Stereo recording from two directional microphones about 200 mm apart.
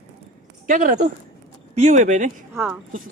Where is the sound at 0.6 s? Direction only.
40° right (ahead or behind).